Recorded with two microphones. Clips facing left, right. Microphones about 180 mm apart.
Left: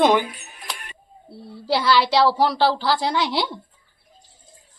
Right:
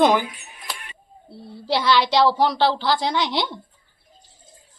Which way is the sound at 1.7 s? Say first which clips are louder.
Left 1 dB; 5° left (ahead or behind).